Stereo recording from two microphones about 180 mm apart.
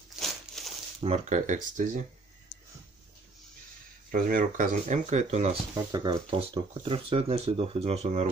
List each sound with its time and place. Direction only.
0.1 s crumpling: centre (ahead or behind)
1.0 s speech: 40° right (ahead or behind)
4.1 s speech: 50° right (ahead or behind)
5.9 s speech: 25° right (ahead or behind)